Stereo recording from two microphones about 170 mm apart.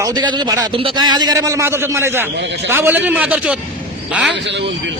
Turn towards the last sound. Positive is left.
turn(degrees=-90)